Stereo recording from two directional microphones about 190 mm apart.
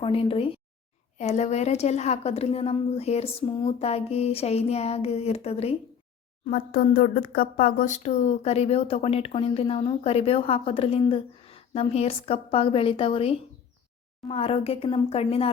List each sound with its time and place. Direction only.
0.0 s a woman's voice: 30° left (ahead or behind)
6.5 s speech: 50° left (ahead or behind); by 15.4 s 30° left (ahead or behind)